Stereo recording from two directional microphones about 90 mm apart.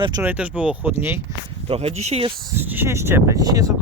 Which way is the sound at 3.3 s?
40° right (ahead or behind).